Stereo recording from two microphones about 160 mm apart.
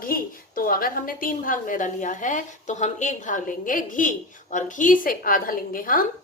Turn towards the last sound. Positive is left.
turn(degrees=60)  # may be behind; listen again after turning